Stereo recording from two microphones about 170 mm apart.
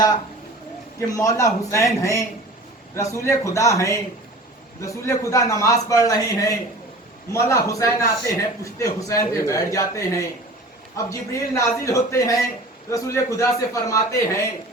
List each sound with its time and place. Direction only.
0.9 s a man's voice: 20° left (ahead or behind)